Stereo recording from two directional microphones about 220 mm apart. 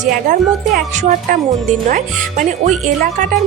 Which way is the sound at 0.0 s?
35° right (ahead or behind).